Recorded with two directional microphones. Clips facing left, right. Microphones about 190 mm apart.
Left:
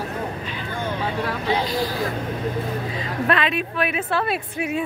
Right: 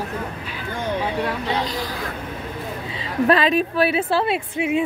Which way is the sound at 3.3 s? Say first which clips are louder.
Right 5 dB; 35° right (ahead or behind).